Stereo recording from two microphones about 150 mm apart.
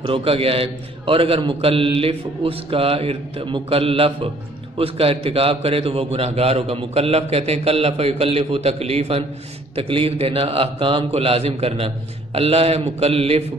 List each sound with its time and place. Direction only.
0.0 s a man's voice: 40° right (ahead or behind)